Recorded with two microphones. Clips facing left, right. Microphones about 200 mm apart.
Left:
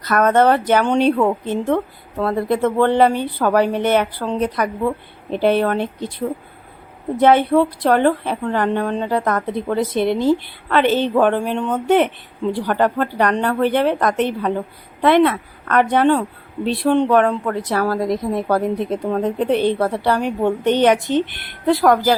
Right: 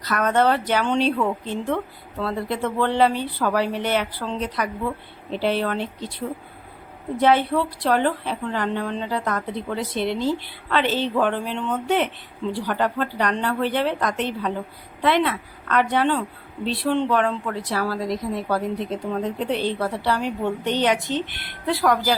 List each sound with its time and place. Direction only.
0.0 s a woman's voice: 50° left (ahead or behind)
7.2 s a woman's voice: 50° left (ahead or behind)